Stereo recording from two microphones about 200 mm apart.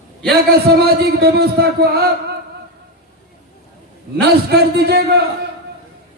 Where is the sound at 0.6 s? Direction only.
50° right (ahead or behind).